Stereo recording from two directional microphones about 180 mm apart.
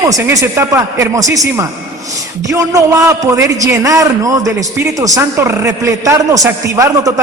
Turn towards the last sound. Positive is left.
turn(degrees=-20)  # may be behind; listen again after turning